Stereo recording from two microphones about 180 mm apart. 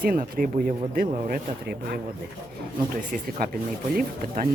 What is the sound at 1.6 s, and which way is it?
Speech, 60° right (ahead or behind).